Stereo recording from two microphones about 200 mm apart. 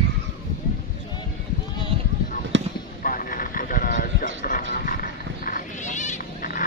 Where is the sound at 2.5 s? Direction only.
65° right (ahead or behind).